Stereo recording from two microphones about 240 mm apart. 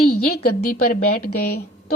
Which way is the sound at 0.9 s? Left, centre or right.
Left.